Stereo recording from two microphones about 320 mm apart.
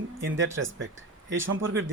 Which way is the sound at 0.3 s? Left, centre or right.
Right.